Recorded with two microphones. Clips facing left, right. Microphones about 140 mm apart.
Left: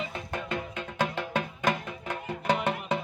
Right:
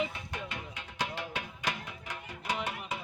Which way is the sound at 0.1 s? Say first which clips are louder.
Left 7 dB; 50° left (ahead or behind).